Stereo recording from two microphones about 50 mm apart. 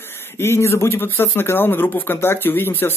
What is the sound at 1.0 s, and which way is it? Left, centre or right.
A man's voice, left.